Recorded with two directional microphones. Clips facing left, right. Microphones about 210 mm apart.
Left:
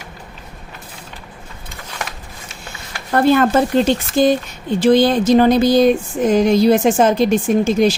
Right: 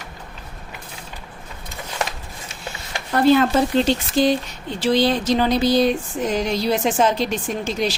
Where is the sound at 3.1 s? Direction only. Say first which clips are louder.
Left 2 dB; 50° left (ahead or behind).